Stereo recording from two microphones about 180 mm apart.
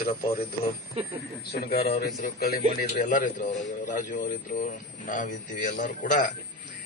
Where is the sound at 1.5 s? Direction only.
60° left (ahead or behind).